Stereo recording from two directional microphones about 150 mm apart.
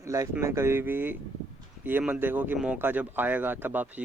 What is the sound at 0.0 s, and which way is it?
Speech, 20° right (ahead or behind).